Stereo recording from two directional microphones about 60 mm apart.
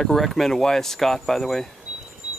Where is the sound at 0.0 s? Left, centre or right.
Centre.